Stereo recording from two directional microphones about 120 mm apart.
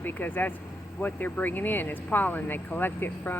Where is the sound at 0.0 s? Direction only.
15° left (ahead or behind).